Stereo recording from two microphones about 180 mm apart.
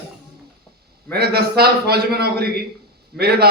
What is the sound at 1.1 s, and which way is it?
A man's voice, 60° right (ahead or behind).